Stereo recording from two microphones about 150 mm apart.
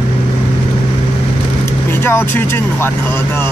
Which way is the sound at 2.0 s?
15° left (ahead or behind).